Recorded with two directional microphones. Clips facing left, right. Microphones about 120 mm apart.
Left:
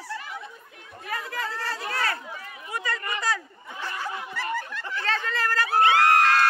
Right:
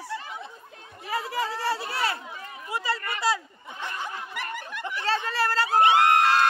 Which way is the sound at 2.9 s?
25° right (ahead or behind).